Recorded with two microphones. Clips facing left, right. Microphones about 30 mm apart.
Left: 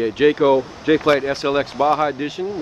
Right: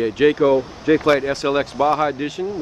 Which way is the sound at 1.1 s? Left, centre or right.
Centre.